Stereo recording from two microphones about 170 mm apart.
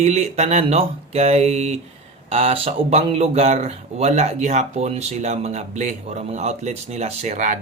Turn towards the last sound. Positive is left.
turn(degrees=-40)  # may be behind; listen again after turning